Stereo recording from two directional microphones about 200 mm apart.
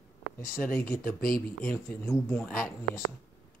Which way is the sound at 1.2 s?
45° left (ahead or behind).